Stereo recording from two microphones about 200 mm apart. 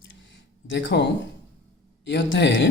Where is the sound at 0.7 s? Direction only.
60° left (ahead or behind).